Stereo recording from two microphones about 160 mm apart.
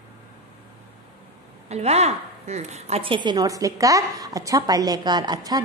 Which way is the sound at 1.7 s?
40° right (ahead or behind).